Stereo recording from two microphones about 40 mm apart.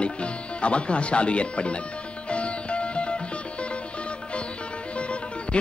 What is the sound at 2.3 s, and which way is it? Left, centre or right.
Music, left.